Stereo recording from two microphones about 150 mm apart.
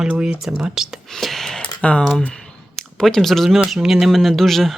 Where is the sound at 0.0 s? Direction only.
5° right (ahead or behind).